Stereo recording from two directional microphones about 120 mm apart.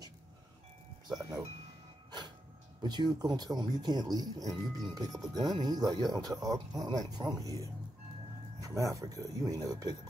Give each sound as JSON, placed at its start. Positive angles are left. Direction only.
{"t": 1.0, "sound": "wind chime", "side_deg": -35}
{"t": 2.0, "sound": "a sound", "side_deg": -40}
{"t": 2.8, "sound": "speech", "side_deg": -35}
{"t": 8.5, "sound": "speech", "side_deg": -30}